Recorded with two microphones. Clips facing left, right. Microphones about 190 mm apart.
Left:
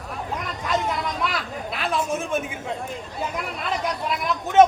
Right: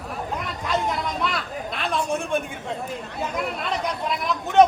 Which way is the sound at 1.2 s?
5° left (ahead or behind).